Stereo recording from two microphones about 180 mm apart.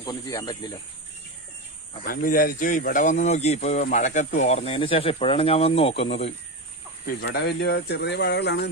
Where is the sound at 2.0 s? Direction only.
50° left (ahead or behind); by 6.1 s 35° left (ahead or behind).